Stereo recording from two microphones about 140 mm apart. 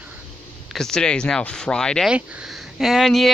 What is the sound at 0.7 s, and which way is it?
Speech, 5° left (ahead or behind).